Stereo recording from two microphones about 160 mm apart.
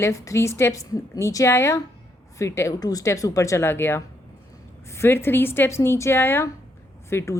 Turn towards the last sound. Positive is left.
turn(degrees=15)  # may be behind; listen again after turning